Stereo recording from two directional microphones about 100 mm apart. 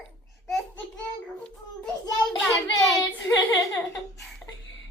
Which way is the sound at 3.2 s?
35° left (ahead or behind).